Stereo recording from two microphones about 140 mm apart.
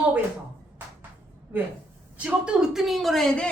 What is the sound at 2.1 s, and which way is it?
Speech, 5° right (ahead or behind).